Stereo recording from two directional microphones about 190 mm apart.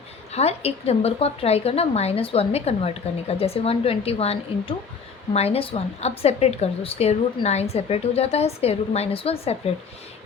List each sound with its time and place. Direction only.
0.3 s a woman's voice: 35° left (ahead or behind)